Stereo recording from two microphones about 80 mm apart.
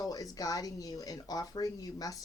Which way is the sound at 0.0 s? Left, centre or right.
Left.